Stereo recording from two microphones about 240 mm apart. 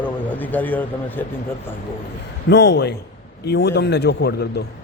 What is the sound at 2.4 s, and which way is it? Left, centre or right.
A man's voice, left.